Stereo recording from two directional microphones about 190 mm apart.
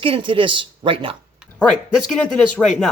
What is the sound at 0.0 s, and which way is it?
Speech, 25° right (ahead or behind).